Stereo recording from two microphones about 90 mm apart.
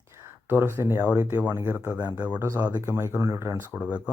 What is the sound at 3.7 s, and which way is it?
Speech, 15° right (ahead or behind).